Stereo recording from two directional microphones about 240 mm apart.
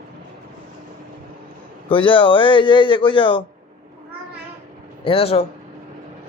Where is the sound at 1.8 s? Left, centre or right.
Left.